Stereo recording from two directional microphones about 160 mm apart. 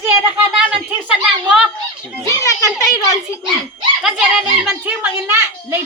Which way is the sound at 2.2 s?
20° left (ahead or behind).